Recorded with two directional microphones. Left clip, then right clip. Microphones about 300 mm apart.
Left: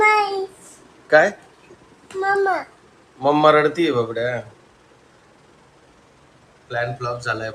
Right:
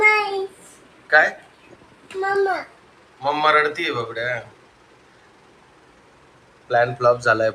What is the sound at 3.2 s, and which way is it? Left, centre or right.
A man's voice, left.